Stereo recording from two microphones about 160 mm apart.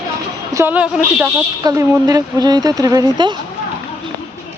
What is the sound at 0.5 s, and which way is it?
Speech, 10° right (ahead or behind).